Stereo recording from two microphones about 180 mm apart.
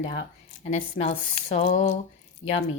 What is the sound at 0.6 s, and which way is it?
A woman's voice, 40° left (ahead or behind).